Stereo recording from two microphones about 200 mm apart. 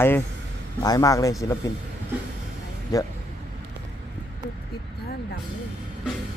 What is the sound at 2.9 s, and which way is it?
Speech, 20° left (ahead or behind).